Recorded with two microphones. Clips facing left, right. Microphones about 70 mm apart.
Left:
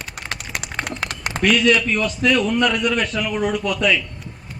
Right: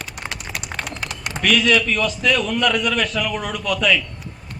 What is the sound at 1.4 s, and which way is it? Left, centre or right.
A man's voice, left.